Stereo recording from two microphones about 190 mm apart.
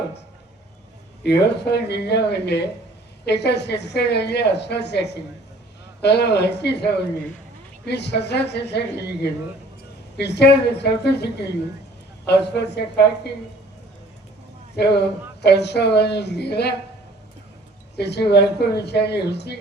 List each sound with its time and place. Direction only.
1.2 s a woman's voice: 60° left (ahead or behind)
14.8 s a woman's voice: 60° left (ahead or behind)
17.9 s a woman's voice: 60° left (ahead or behind)